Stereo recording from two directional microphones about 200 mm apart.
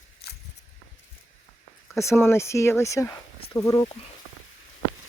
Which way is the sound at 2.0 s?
15° left (ahead or behind).